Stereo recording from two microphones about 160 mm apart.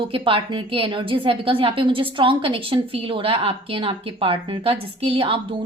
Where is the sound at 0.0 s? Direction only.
35° right (ahead or behind).